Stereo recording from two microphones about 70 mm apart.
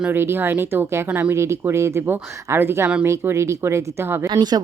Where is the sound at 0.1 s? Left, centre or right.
Right.